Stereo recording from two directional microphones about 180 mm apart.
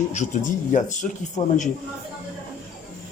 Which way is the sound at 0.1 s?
45° left (ahead or behind).